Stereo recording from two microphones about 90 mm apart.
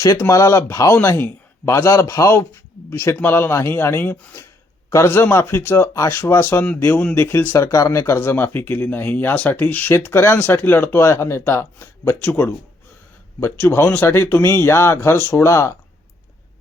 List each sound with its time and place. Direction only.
0.0 s a man's voice: 40° left (ahead or behind)